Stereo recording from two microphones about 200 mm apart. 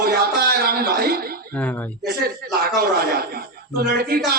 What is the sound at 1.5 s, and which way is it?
Speech, 10° left (ahead or behind).